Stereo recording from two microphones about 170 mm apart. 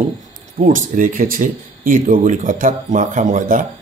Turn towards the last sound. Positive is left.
turn(degrees=-50)  # may be behind; listen again after turning